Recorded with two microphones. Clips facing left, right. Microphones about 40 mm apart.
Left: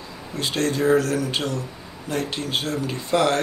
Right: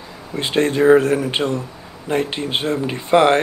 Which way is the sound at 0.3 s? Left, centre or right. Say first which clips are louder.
Right 5 dB; right.